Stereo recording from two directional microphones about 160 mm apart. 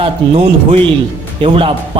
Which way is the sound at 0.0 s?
40° right (ahead or behind).